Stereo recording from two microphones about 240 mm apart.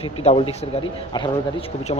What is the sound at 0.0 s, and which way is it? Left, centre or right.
Speech, left.